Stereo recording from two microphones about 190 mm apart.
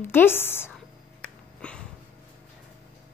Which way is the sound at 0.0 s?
10° left (ahead or behind).